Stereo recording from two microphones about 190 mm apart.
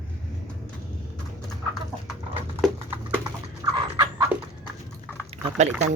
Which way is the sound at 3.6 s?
20° right (ahead or behind).